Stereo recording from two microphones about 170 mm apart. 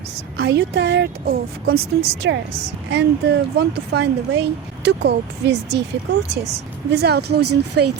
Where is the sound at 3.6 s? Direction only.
75° right (ahead or behind).